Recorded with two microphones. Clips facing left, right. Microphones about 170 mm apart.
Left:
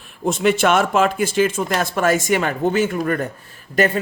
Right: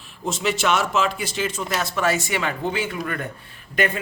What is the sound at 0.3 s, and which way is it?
Speech, 55° left (ahead or behind).